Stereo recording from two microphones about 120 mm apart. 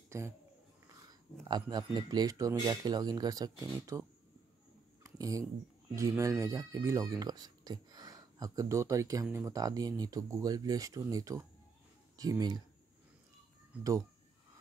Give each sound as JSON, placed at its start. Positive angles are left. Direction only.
{"t": 0.1, "sound": "speech", "side_deg": -20}
{"t": 1.5, "sound": "speech", "side_deg": -35}
{"t": 5.0, "sound": "a sound", "side_deg": -30}
{"t": 5.9, "sound": "speech", "side_deg": -25}